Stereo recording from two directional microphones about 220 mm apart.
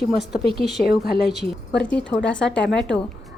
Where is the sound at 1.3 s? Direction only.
Centre (ahead or behind).